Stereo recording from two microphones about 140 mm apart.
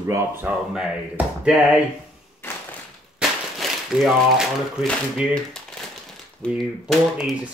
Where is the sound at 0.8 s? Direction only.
5° right (ahead or behind).